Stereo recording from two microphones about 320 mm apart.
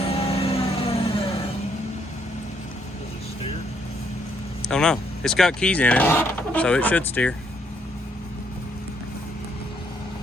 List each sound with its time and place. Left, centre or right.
0.1 s vehicle: centre
4.7 s speech: centre